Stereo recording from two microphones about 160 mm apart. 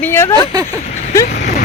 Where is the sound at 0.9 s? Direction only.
45° left (ahead or behind).